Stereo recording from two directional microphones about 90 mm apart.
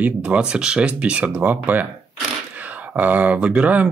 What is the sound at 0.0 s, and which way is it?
Speech, 15° right (ahead or behind).